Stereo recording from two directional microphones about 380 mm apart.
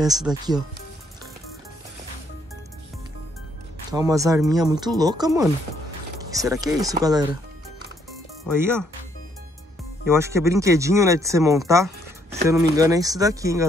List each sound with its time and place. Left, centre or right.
0.0 s speech: centre
3.9 s speech: centre
8.5 s speech: centre
10.0 s speech: centre